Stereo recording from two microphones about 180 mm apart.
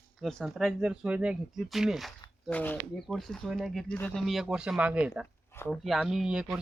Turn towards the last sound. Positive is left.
turn(degrees=-5)  # may be behind; listen again after turning